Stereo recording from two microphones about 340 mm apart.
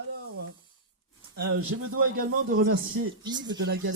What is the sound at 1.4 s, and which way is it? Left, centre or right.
Speech, right.